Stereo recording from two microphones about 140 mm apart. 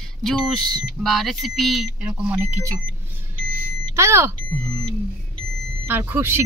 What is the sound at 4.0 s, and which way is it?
Speech, 20° right (ahead or behind).